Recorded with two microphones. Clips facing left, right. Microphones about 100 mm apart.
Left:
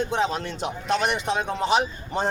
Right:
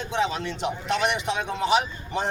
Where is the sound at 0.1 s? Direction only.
40° left (ahead or behind).